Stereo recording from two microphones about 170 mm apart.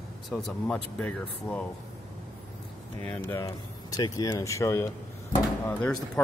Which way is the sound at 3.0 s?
10° left (ahead or behind).